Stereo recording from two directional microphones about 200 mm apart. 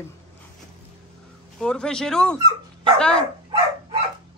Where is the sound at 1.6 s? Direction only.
5° left (ahead or behind).